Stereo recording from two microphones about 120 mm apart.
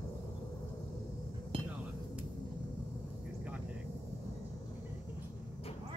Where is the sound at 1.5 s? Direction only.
50° right (ahead or behind).